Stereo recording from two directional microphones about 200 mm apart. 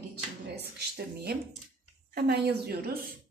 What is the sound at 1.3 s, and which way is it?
A woman's voice, 50° right (ahead or behind).